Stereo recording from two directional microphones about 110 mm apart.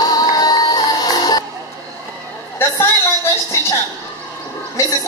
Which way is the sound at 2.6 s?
20° left (ahead or behind).